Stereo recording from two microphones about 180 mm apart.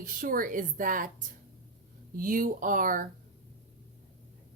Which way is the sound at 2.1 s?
50° right (ahead or behind).